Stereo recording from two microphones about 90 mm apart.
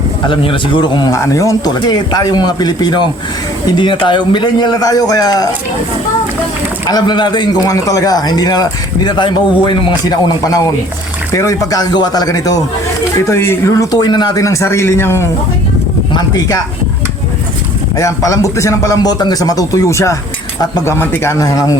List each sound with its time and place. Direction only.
0.3 s a man's voice: 70° left (ahead or behind)
1.1 s speech: 35° left (ahead or behind)
6.8 s speech: 50° left (ahead or behind)
7.7 s speech: 40° left (ahead or behind)
13.1 s speech: 30° left (ahead or behind)
14.0 s speech: 55° left (ahead or behind)
14.3 s speech: 35° left (ahead or behind)
17.9 s speech: 40° left (ahead or behind)
21.4 s speech: 40° left (ahead or behind)